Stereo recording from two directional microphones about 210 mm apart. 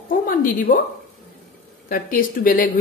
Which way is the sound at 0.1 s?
40° left (ahead or behind).